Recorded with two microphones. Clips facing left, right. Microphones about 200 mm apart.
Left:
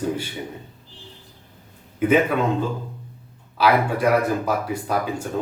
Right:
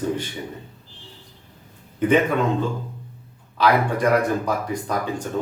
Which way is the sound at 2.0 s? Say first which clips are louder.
Even; 5° left (ahead or behind).